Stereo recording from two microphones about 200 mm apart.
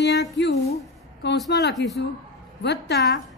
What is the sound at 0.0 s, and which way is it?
A woman's voice, 60° left (ahead or behind).